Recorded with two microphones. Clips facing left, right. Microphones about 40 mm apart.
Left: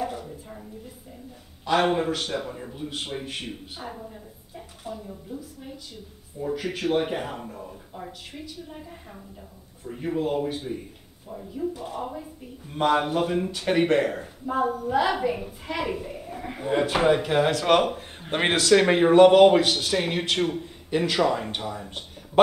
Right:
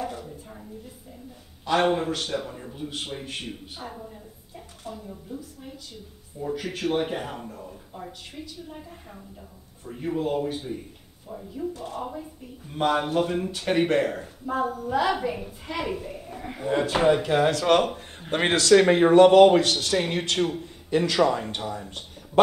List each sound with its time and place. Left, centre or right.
0.0 s a sound: centre
1.6 s a man's voice: centre
17.2 s speech: left
17.7 s speech: centre
18.4 s a man's voice: centre
18.9 s a man's voice: centre